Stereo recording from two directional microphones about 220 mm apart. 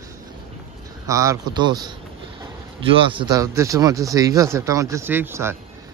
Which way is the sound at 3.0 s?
20° right (ahead or behind).